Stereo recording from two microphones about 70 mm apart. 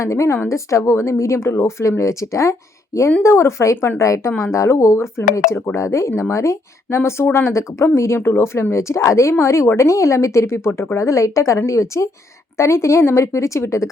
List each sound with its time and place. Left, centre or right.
0.0 s speech: left